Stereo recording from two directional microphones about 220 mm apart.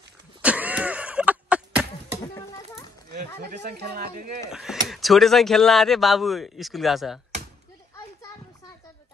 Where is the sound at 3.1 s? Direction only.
40° right (ahead or behind).